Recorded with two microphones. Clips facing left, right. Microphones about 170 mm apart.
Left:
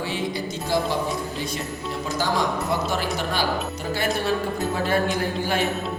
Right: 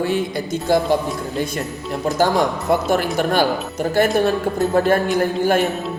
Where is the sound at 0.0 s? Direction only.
50° right (ahead or behind).